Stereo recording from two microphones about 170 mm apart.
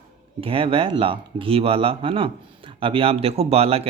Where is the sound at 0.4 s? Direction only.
35° right (ahead or behind).